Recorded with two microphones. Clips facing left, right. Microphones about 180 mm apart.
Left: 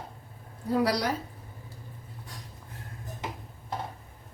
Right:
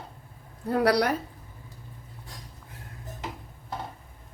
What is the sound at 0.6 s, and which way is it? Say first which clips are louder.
Speech: right 3 dB; 60° right (ahead or behind).